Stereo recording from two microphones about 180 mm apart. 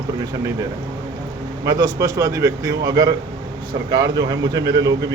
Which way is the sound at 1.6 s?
20° right (ahead or behind).